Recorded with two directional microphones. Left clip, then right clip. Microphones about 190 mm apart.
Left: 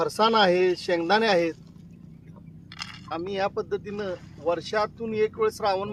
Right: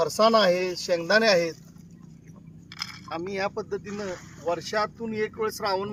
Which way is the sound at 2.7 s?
20° right (ahead or behind).